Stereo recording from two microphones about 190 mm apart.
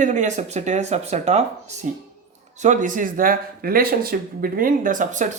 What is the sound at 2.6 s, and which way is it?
Speech, 40° right (ahead or behind).